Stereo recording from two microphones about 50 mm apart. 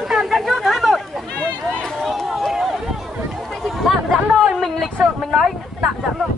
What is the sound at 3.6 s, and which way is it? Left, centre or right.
Chatter, centre.